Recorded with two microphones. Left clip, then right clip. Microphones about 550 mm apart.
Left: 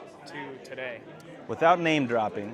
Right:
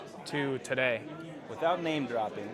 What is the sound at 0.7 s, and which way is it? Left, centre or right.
Speech, right.